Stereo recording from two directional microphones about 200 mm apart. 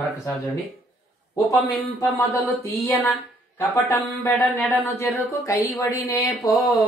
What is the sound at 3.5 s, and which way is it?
Mantra, 15° left (ahead or behind).